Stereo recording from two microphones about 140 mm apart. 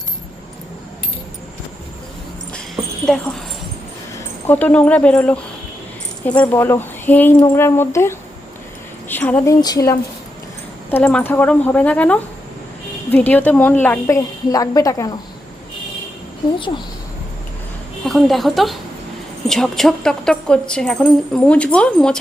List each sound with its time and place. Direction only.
3.1 s a woman's voice: 5° left (ahead or behind)
4.4 s speech: 10° left (ahead or behind)
9.5 s speech: 25° left (ahead or behind)
10.9 s speech: 10° left (ahead or behind)
14.5 s speech: 25° left (ahead or behind)
16.6 s speech: 35° left (ahead or behind)
18.0 s a woman's voice: centre (ahead or behind)